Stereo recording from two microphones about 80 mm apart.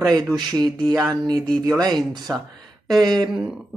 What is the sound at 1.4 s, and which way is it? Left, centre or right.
Speech, centre.